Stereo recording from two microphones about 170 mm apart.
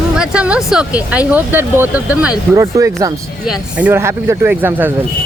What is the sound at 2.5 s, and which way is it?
Speech, 20° right (ahead or behind).